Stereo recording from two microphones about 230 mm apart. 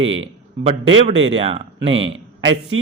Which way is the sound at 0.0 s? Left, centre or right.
Right.